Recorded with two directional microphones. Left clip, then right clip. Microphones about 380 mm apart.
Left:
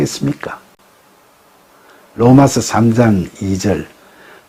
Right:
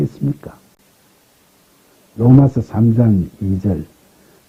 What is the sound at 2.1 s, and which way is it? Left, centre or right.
Speech, centre.